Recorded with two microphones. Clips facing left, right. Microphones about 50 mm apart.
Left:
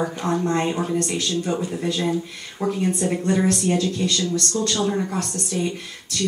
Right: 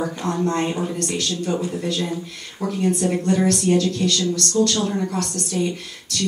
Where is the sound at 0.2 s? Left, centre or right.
Centre.